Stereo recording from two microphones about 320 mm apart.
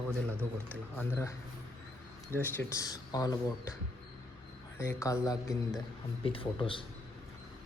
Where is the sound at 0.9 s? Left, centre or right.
Centre.